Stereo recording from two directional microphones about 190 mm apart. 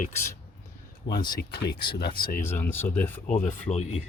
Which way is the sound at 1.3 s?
60° left (ahead or behind).